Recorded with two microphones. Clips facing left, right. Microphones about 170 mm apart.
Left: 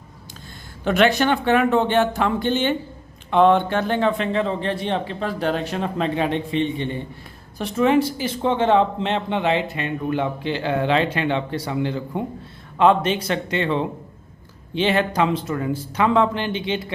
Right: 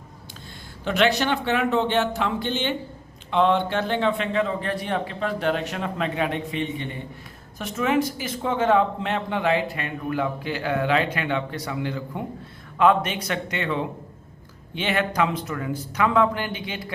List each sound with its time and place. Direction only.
0.9 s a man's voice: 50° left (ahead or behind); by 16.9 s 25° left (ahead or behind)